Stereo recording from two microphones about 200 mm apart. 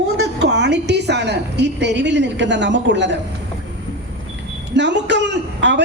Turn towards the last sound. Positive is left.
turn(degrees=-60)  # may be behind; listen again after turning